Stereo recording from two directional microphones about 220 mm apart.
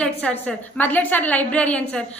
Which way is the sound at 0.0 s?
5° left (ahead or behind).